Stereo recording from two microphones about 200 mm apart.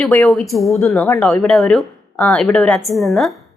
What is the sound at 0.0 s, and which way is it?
A woman's voice, 5° left (ahead or behind).